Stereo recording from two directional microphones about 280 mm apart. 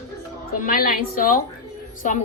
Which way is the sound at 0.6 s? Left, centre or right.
Left.